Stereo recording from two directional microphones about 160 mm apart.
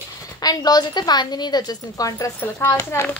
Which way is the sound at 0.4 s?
25° left (ahead or behind).